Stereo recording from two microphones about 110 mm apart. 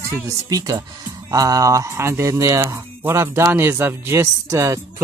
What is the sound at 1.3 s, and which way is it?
Speech, 30° right (ahead or behind).